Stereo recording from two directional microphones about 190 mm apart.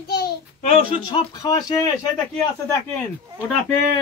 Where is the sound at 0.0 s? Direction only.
55° left (ahead or behind).